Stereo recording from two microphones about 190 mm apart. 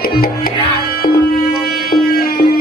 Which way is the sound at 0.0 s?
50° left (ahead or behind).